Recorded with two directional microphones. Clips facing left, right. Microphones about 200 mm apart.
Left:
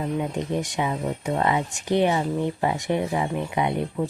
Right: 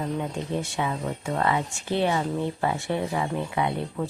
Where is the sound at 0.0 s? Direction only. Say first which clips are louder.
Left 3 dB; 15° left (ahead or behind).